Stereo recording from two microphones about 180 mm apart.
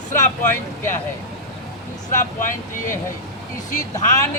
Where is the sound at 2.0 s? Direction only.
45° left (ahead or behind).